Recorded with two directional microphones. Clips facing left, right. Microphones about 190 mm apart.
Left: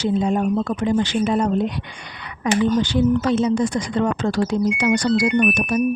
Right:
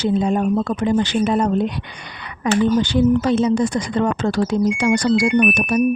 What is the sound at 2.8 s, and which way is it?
Speech, 60° right (ahead or behind).